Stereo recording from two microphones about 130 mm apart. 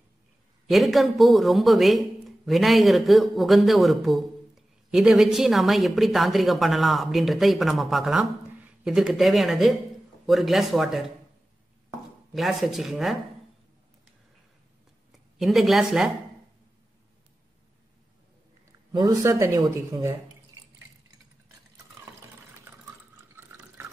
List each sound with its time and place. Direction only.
0.7 s a man's voice: centre (ahead or behind)
12.4 s a man's voice: centre (ahead or behind)
15.3 s a man's voice: centre (ahead or behind)
18.7 s a sound: 30° right (ahead or behind)
19.2 s speech: 25° right (ahead or behind)